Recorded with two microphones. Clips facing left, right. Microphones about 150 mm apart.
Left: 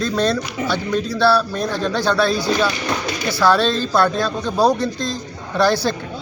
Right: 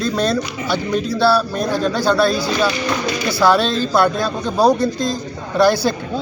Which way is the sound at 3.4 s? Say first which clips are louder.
Right 1 dB; 10° right (ahead or behind).